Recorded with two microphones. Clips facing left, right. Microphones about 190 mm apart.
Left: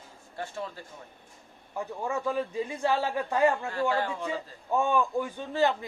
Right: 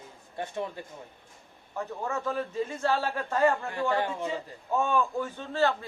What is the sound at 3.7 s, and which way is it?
Speech, 20° right (ahead or behind).